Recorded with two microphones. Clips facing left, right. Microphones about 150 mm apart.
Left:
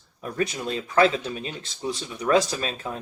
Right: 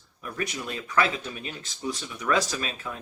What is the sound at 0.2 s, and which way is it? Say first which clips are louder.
Speech: left 5 dB; 30° left (ahead or behind).